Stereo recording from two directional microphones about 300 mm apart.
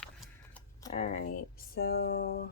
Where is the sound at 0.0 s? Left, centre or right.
Centre.